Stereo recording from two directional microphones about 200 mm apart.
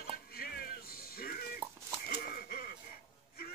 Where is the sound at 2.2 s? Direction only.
50° left (ahead or behind).